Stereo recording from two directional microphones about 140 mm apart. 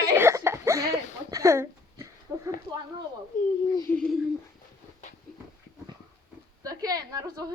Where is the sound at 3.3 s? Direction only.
75° left (ahead or behind).